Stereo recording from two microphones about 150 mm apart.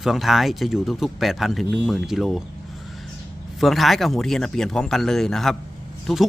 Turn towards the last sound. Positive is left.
turn(degrees=0)  # may be behind; listen again after turning